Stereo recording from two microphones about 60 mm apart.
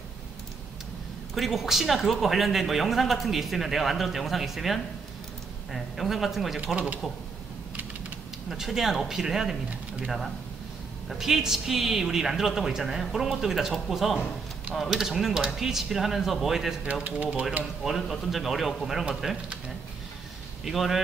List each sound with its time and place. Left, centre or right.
1.3 s speech: centre
6.6 s speech: centre
8.5 s speech: centre
17.0 s speech: right
17.8 s speech: centre
20.6 s speech: centre